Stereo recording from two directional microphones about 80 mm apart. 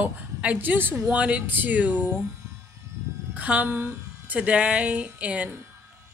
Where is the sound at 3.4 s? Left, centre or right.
Centre.